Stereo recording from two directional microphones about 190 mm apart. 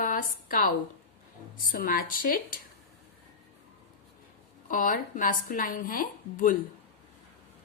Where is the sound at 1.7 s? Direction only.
50° left (ahead or behind).